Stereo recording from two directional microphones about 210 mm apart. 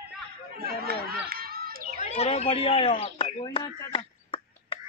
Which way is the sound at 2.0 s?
30° left (ahead or behind).